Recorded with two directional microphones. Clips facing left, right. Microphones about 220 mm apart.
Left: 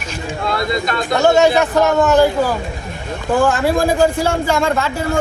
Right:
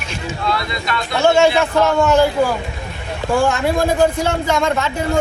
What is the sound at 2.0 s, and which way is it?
Speech, 10° left (ahead or behind).